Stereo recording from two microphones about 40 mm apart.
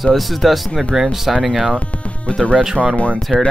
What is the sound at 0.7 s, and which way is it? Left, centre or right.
Speech, centre.